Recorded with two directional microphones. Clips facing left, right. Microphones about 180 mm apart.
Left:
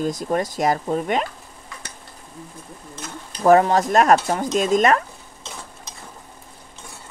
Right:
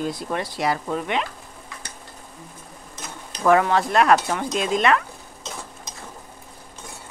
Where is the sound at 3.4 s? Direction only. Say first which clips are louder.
Left 3 dB; 40° left (ahead or behind).